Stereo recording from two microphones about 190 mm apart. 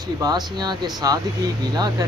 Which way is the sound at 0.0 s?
20° right (ahead or behind).